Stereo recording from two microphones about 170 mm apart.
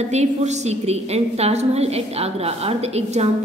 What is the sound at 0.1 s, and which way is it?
A woman's voice, 40° right (ahead or behind).